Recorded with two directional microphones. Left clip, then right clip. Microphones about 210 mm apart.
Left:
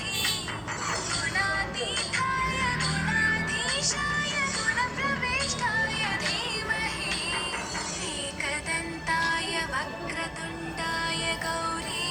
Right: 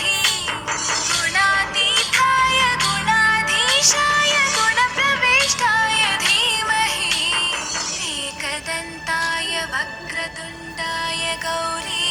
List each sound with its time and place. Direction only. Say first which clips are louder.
0.0 s music: right 10 dB; 50° right (ahead or behind)
8.4 s music: right 2 dB; 35° right (ahead or behind)